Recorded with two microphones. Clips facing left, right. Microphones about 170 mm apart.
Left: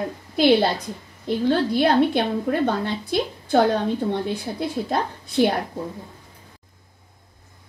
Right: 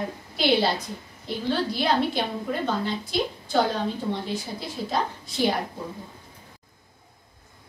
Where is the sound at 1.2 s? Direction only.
55° left (ahead or behind).